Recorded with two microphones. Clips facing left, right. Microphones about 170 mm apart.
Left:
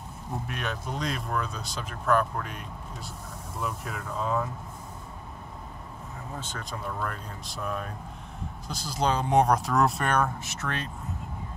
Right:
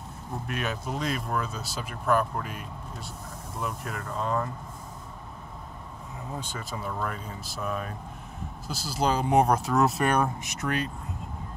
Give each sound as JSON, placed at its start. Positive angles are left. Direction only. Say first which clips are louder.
{"t": 0.5, "sound": "speech", "louder": "right 5 dB", "side_deg": -5}
{"t": 6.3, "sound": "speech", "louder": "right 2 dB", "side_deg": -10}